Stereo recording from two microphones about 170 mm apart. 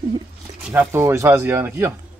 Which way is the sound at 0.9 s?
15° right (ahead or behind).